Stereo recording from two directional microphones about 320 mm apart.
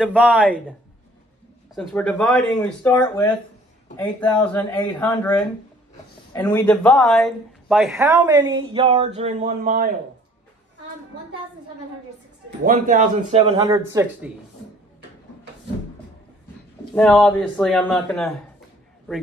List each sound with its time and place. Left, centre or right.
0.0 s speech: centre
1.8 s speech: centre
6.3 s speech: centre; by 9.8 s right
12.4 s speech: right; by 14.3 s centre
16.9 s speech: centre